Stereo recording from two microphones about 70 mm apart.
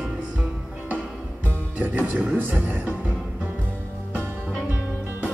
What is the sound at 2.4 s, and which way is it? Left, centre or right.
Music, right.